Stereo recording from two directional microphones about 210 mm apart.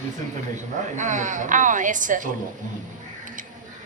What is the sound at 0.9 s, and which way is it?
A woman's voice, 35° right (ahead or behind).